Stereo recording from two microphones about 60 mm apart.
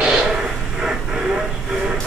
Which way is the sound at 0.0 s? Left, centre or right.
Centre.